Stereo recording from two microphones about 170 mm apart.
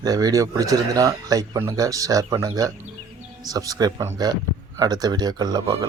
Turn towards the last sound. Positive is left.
turn(degrees=-25)  # may be behind; listen again after turning